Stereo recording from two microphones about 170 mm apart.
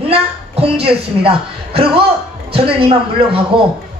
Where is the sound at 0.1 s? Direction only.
35° right (ahead or behind).